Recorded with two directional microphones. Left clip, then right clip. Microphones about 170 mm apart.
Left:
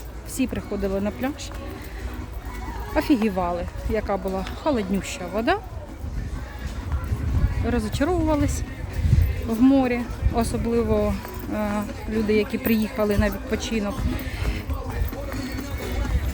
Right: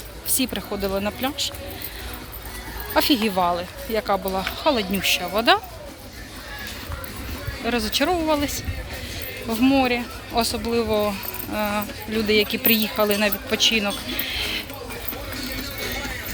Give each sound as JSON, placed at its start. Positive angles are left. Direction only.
{"t": 0.5, "sound": "speech", "side_deg": 5}
{"t": 2.9, "sound": "speech", "side_deg": 10}
{"t": 7.6, "sound": "speech", "side_deg": 5}